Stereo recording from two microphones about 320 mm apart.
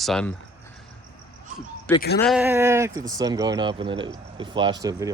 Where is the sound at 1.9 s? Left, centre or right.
Centre.